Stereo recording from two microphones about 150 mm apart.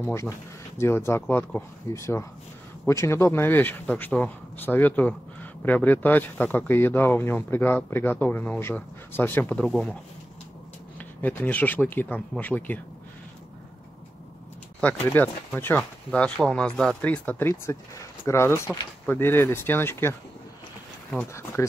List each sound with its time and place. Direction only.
0.0 s speech: 15° left (ahead or behind); by 9.9 s centre (ahead or behind)
11.0 s speech: 10° left (ahead or behind)
14.8 s speech: 10° left (ahead or behind)
21.6 s speech: 20° left (ahead or behind)